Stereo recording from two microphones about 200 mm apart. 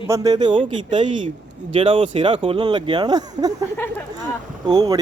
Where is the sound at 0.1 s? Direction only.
20° right (ahead or behind).